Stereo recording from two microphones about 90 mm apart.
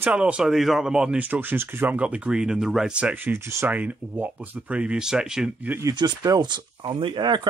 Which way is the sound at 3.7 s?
15° right (ahead or behind).